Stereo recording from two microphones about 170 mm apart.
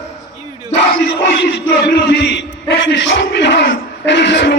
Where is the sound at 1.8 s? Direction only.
90° left.